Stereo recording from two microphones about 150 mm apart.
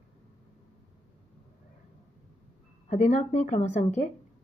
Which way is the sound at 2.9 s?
50° left (ahead or behind).